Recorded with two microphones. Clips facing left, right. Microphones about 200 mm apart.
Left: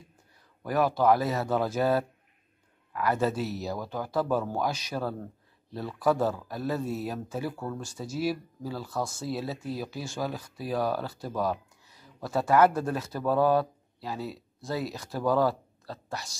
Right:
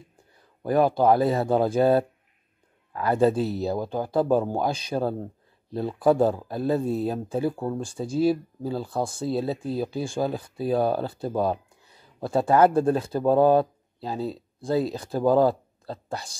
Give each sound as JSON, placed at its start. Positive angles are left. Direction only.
{"t": 0.7, "sound": "speech", "side_deg": -25}